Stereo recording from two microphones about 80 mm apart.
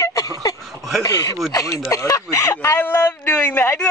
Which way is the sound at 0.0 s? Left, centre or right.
Left.